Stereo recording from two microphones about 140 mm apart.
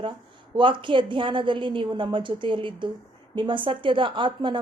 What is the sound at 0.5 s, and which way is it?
Speech, 35° right (ahead or behind).